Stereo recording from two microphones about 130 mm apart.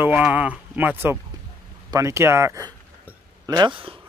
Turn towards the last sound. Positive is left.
turn(degrees=-35)  # may be behind; listen again after turning